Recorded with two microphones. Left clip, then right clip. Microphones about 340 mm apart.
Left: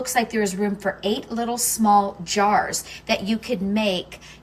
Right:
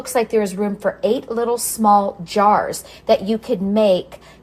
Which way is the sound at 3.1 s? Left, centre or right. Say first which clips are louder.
Right 7 dB; centre.